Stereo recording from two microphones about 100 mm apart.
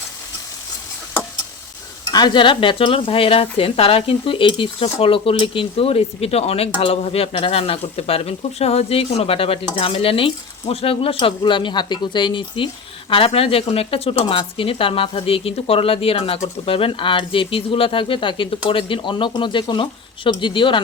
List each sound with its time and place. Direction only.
2.0 s speech: 50° left (ahead or behind); by 6.7 s 90° left
6.7 s speech: 75° left (ahead or behind); by 12.6 s 55° left (ahead or behind)
13.1 s speech: 65° left (ahead or behind)